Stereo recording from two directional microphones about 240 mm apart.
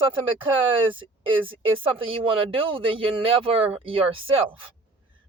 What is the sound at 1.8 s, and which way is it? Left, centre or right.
Speech, right.